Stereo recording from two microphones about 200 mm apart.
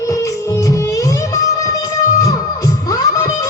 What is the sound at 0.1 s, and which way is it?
Music, 15° left (ahead or behind).